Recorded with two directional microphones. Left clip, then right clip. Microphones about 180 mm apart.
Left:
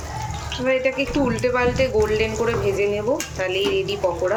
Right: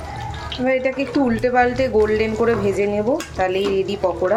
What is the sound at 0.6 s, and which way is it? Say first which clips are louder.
Speech: right 1 dB; 20° right (ahead or behind).